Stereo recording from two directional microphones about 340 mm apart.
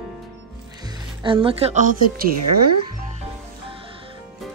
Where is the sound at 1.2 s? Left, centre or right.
Centre.